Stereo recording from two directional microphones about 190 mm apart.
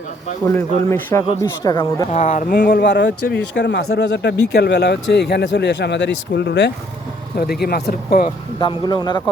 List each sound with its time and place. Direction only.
0.4 s a man's voice: 10° left (ahead or behind)
2.1 s speech: 35° left (ahead or behind)
2.5 s speech: 60° left (ahead or behind)
8.5 s speech: 25° left (ahead or behind)